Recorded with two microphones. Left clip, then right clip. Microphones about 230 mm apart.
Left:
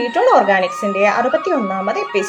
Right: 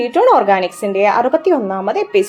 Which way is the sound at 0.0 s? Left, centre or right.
Right.